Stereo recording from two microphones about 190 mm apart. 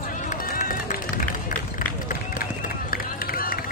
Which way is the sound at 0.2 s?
45° left (ahead or behind).